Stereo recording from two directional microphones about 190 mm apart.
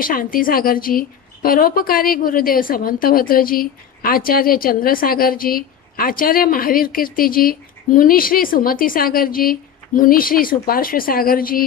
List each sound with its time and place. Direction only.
0.0 s a woman's voice: 50° left (ahead or behind)